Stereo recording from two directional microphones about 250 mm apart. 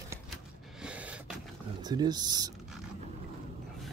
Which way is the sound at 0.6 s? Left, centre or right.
Centre.